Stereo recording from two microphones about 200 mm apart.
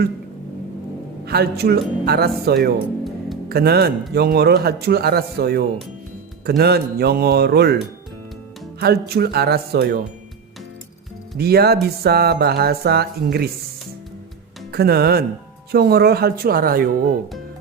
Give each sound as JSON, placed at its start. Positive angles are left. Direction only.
{"t": 1.2, "sound": "music", "side_deg": -50}
{"t": 8.8, "sound": "music", "side_deg": -55}
{"t": 11.3, "sound": "music", "side_deg": -50}
{"t": 14.7, "sound": "speech", "side_deg": -50}
{"t": 15.7, "sound": "music", "side_deg": -50}